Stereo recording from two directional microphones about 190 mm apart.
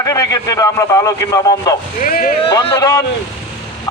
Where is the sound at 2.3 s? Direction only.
30° left (ahead or behind).